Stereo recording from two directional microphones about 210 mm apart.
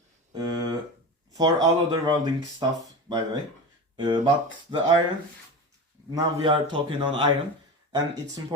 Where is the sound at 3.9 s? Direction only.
20° right (ahead or behind).